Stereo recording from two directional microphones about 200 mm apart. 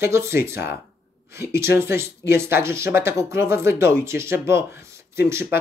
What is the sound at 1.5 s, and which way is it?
Speech, 10° right (ahead or behind).